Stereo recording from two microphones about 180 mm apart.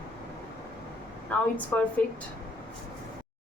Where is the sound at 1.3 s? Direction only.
10° left (ahead or behind).